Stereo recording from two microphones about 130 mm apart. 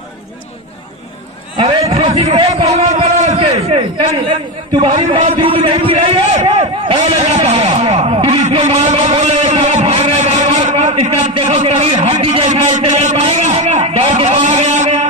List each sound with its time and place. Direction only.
1.6 s a man's voice: 50° right (ahead or behind)
4.3 s a man's voice: 40° right (ahead or behind)
8.4 s vehicle: 55° right (ahead or behind)
12.0 s a man's voice: 55° right (ahead or behind)
12.4 s a sound: 60° right (ahead or behind)